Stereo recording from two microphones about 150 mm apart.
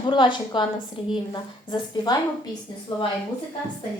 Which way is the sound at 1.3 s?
25° left (ahead or behind).